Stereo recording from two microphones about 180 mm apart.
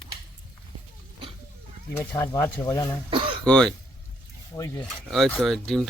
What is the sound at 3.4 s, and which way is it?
Speech, 5° left (ahead or behind).